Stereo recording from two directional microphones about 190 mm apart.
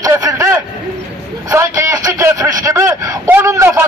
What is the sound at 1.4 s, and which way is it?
A man's voice, 15° right (ahead or behind).